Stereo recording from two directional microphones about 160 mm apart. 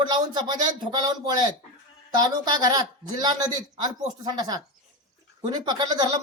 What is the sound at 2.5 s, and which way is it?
Speech, 25° right (ahead or behind).